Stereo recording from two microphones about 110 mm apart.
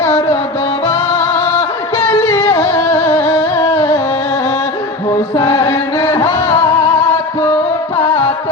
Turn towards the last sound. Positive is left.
turn(degrees=30)  # may be behind; listen again after turning